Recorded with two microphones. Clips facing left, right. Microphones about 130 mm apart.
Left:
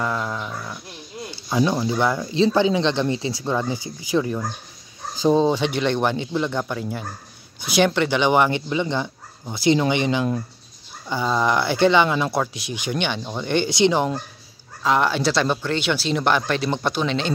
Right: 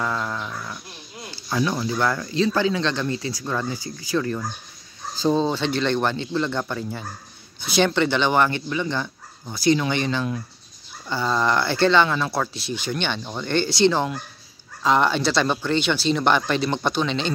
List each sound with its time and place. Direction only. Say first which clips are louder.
0.0 s dog: left 1 dB; 5° left (ahead or behind)
1.3 s speech: left 3 dB; 20° left (ahead or behind)
14.8 s speech: even; 5° left (ahead or behind)